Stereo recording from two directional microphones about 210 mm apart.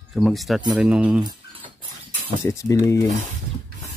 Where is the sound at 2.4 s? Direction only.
15° left (ahead or behind).